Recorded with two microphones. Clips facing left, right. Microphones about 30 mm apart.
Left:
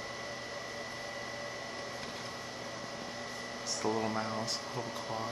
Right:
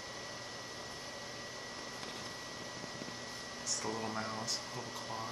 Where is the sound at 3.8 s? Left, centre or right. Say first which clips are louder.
Left 7 dB; centre.